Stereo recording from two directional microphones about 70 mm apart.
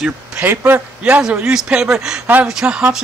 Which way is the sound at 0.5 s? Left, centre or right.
Right.